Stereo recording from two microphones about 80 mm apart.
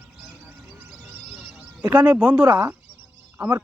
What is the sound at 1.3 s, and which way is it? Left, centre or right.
Sheep, centre.